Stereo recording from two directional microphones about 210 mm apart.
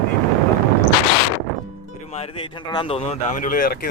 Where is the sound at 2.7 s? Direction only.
25° left (ahead or behind); by 3.8 s 40° left (ahead or behind).